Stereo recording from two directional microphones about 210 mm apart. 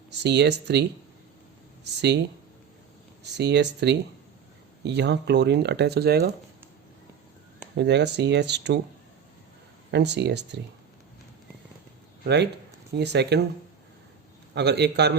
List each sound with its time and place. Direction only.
0.1 s speech: 55° right (ahead or behind)
3.3 s speech: 55° right (ahead or behind)
7.8 s speech: 55° right (ahead or behind)
9.9 s speech: 55° right (ahead or behind)
12.2 s speech: 55° right (ahead or behind)
14.5 s speech: 55° right (ahead or behind)